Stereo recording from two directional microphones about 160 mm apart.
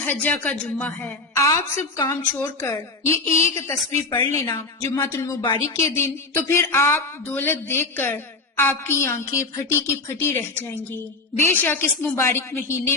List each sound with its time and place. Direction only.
0.2 s speech: 10° left (ahead or behind)
1.4 s a woman's voice: 20° left (ahead or behind)